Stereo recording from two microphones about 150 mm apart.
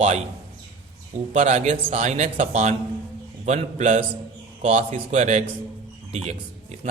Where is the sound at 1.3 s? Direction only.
50° right (ahead or behind).